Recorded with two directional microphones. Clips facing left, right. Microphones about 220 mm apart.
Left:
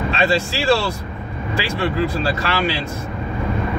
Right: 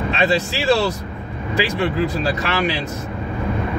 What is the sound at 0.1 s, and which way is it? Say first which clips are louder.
Speech: right 1 dB; 20° right (ahead or behind).